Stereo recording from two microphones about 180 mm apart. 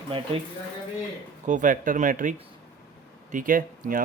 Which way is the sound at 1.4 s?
45° right (ahead or behind).